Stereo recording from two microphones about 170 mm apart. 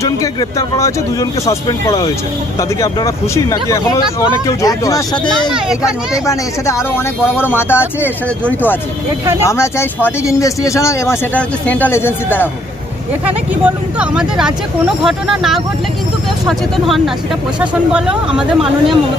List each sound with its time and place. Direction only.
0.0 s speech: 20° left (ahead or behind)
5.5 s speech: 5° right (ahead or behind)
6.2 s speech: 15° left (ahead or behind)
9.4 s speech: 15° left (ahead or behind)
14.0 s speech: 5° right (ahead or behind)